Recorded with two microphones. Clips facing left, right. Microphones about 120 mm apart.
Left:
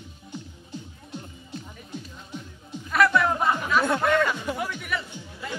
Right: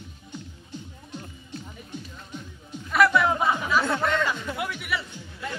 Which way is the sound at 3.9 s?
10° left (ahead or behind).